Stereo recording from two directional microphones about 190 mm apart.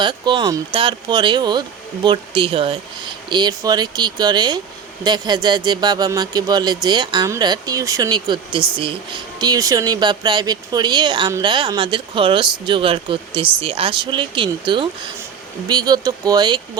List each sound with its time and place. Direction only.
0.0 s speech: 25° right (ahead or behind)